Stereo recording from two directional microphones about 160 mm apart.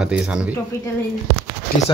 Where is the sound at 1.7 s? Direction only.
70° left (ahead or behind).